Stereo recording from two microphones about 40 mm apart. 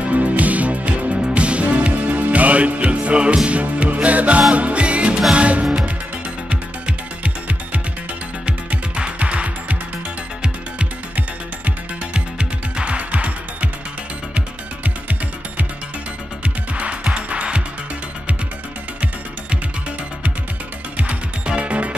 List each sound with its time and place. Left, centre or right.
0.0 s music: right
12.1 s music: right
20.9 s music: right